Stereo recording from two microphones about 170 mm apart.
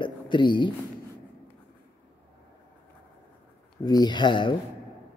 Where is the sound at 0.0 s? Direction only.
25° left (ahead or behind).